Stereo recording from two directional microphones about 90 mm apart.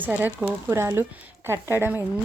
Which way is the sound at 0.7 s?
30° right (ahead or behind).